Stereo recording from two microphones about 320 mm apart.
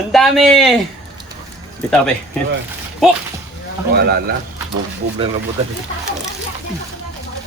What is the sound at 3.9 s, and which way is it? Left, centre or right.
Speech, right.